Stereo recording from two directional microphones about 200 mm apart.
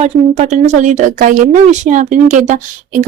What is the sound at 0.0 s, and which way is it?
Speech, 35° right (ahead or behind).